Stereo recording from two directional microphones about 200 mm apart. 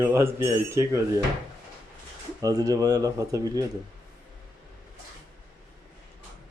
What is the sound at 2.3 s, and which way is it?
Speech, 20° right (ahead or behind).